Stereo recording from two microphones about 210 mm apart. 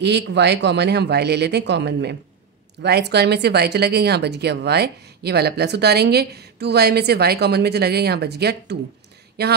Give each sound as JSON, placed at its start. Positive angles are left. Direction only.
{"t": 0.0, "sound": "speech", "side_deg": -55}